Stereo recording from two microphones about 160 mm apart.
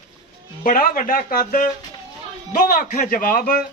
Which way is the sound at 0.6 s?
65° left (ahead or behind).